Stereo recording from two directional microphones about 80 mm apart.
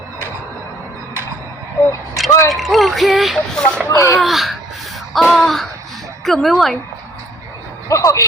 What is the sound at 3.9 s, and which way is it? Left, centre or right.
Speech, left.